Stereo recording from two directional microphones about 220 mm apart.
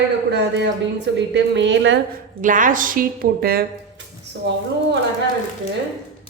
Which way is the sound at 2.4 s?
35° right (ahead or behind).